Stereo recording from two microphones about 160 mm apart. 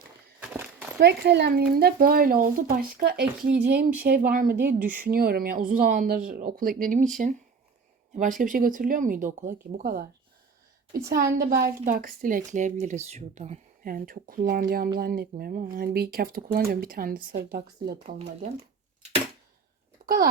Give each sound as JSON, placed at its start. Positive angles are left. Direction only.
{"t": 0.3, "sound": "walk", "side_deg": -10}
{"t": 0.9, "sound": "speech", "side_deg": -85}
{"t": 1.7, "sound": "speech", "side_deg": -70}
{"t": 4.0, "sound": "speech", "side_deg": -65}
{"t": 13.8, "sound": "speech", "side_deg": -65}
{"t": 18.0, "sound": "speech", "side_deg": -40}
{"t": 20.0, "sound": "a sound", "side_deg": -70}